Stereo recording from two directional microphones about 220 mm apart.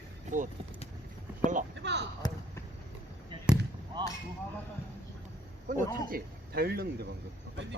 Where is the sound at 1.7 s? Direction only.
50° right (ahead or behind).